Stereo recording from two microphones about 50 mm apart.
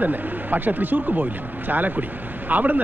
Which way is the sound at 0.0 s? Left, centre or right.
Right.